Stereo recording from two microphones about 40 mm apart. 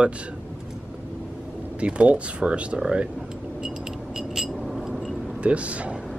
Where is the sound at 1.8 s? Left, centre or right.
Right.